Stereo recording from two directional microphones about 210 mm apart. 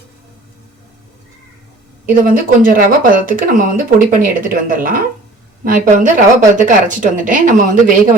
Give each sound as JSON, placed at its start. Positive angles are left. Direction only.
{"t": 2.0, "sound": "speech", "side_deg": -40}